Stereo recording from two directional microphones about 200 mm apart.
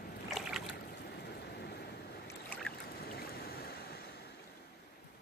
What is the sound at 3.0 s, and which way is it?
Boat, 50° left (ahead or behind).